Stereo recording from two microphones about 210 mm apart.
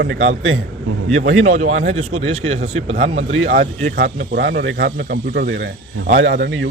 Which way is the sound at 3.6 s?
50° right (ahead or behind).